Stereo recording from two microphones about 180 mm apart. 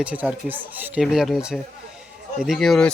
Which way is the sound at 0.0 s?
5° right (ahead or behind).